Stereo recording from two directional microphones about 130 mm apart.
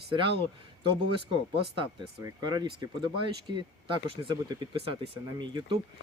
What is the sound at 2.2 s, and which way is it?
Speech, 30° right (ahead or behind).